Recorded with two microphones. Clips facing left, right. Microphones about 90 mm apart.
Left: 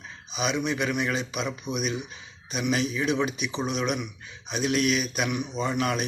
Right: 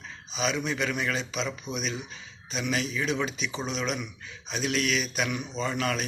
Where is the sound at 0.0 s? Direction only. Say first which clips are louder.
Left 1 dB; 15° left (ahead or behind).